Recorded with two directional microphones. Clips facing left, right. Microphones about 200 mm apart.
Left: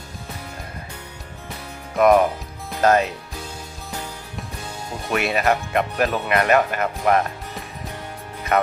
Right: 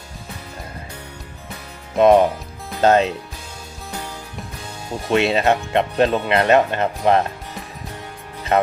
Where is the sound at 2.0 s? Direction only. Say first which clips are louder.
Right 3 dB; 25° right (ahead or behind).